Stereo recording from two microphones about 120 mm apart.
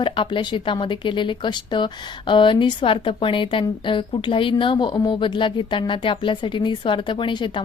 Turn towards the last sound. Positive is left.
turn(degrees=45)  # may be behind; listen again after turning